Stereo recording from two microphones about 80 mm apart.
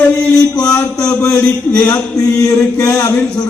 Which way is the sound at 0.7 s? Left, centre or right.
Left.